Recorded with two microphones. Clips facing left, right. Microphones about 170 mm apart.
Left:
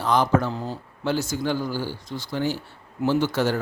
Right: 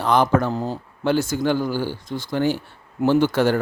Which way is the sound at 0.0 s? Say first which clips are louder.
Right 3 dB; 60° right (ahead or behind).